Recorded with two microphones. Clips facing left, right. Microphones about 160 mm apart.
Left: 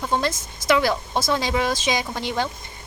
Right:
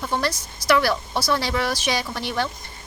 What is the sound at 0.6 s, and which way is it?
Speech, 20° left (ahead or behind).